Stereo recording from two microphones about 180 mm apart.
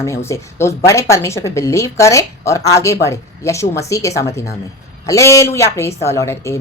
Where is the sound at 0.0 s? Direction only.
15° left (ahead or behind).